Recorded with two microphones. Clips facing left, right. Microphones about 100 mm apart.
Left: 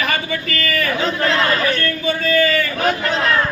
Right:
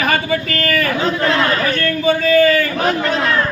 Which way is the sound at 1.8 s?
55° right (ahead or behind).